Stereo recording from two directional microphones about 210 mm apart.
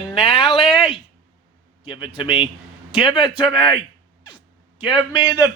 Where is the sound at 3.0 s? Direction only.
20° left (ahead or behind).